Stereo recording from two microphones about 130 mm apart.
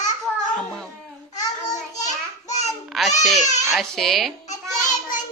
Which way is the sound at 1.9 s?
65° left (ahead or behind).